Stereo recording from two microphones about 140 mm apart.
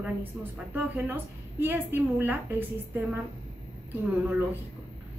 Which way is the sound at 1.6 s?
15° right (ahead or behind).